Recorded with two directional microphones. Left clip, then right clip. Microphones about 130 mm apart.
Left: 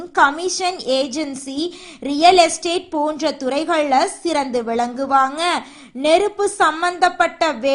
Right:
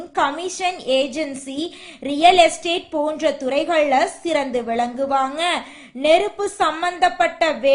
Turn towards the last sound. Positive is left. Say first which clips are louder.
# even
turn(degrees=35)  # may be behind; listen again after turning